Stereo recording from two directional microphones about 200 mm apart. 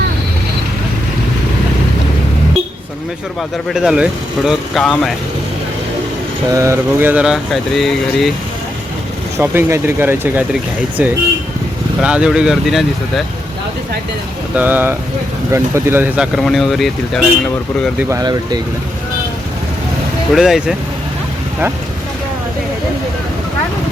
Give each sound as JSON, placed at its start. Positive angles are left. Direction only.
{"t": 3.7, "sound": "speech", "side_deg": 0}
{"t": 6.5, "sound": "speech", "side_deg": -15}
{"t": 9.4, "sound": "speech", "side_deg": -10}
{"t": 14.5, "sound": "speech", "side_deg": -10}
{"t": 18.1, "sound": "speech", "side_deg": -20}
{"t": 20.3, "sound": "speech", "side_deg": -5}